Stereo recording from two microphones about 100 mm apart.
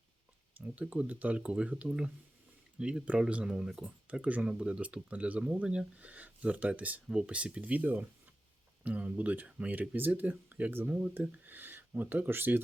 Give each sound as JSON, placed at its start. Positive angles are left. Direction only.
{"t": 0.8, "sound": "speech", "side_deg": -15}